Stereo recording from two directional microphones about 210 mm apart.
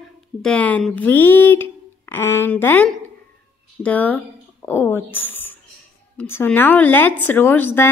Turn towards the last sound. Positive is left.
turn(degrees=10)  # may be behind; listen again after turning